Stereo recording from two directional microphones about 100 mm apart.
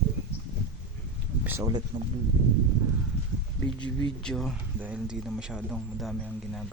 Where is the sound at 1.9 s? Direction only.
50° right (ahead or behind).